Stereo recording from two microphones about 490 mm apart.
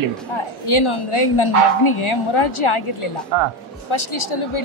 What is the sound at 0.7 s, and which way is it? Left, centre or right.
A woman's voice, left.